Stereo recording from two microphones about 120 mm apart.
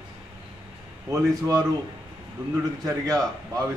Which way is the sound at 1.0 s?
25° right (ahead or behind).